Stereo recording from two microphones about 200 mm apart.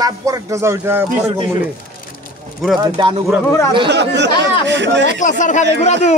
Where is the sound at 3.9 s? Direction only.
60° right (ahead or behind).